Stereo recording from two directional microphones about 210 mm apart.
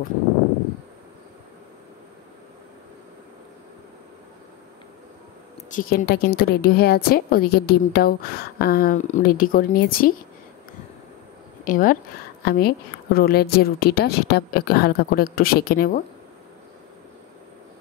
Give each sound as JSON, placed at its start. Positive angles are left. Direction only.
{"t": 5.7, "sound": "a woman's voice", "side_deg": 40}
{"t": 11.6, "sound": "a woman's voice", "side_deg": 40}